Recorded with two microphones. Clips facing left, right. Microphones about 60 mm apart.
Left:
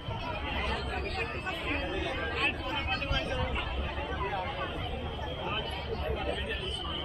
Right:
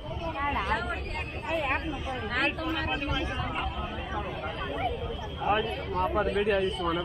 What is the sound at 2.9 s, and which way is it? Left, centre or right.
Speech, centre.